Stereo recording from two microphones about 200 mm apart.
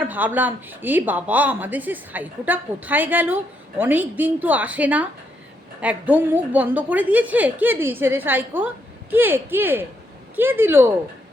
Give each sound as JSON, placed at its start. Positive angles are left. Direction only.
{"t": 0.0, "sound": "a woman's voice", "side_deg": -10}